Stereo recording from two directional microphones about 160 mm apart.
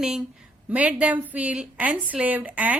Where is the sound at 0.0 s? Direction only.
5° right (ahead or behind).